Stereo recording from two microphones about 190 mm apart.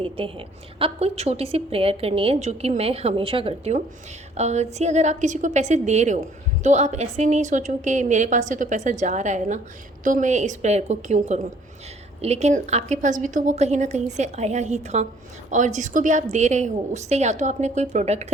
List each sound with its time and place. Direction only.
0.0 s a woman's voice: 30° right (ahead or behind)